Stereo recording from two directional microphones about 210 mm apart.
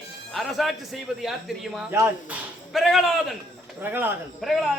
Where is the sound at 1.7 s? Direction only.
10° right (ahead or behind).